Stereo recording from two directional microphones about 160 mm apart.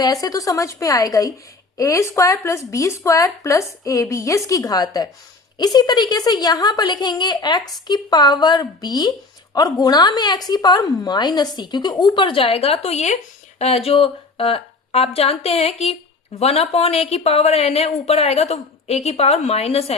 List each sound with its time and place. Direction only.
0.0 s a woman's voice: 25° left (ahead or behind); by 20.0 s 40° left (ahead or behind)